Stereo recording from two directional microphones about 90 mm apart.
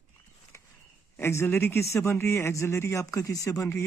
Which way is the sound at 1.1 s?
25° left (ahead or behind).